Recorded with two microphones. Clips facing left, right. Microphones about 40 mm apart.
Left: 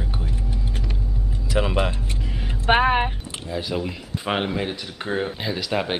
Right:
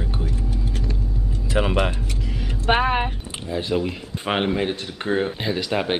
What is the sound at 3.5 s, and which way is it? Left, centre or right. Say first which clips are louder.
Speech: right 3 dB; centre.